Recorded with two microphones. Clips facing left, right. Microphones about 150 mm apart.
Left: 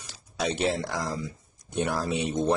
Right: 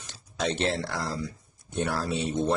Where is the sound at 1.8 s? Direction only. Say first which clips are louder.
Left 1 dB; 15° left (ahead or behind).